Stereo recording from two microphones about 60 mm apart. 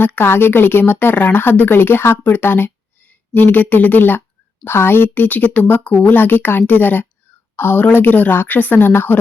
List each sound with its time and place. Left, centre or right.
0.0 s a woman's voice: left